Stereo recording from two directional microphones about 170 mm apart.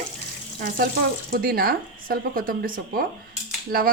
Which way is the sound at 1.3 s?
60° right (ahead or behind).